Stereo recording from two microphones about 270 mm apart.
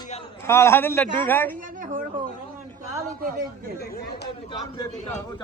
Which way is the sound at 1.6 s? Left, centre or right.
Right.